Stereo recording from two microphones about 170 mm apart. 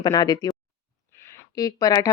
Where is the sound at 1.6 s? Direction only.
20° left (ahead or behind).